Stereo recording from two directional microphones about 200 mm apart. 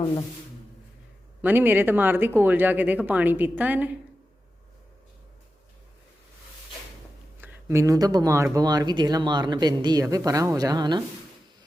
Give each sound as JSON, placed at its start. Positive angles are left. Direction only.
{"t": 1.4, "sound": "speech", "side_deg": -10}
{"t": 7.4, "sound": "speech", "side_deg": -10}